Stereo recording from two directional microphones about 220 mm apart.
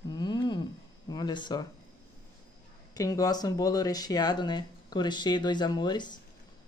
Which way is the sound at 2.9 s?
15° left (ahead or behind).